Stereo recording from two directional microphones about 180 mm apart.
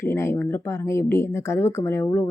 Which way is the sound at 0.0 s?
15° left (ahead or behind).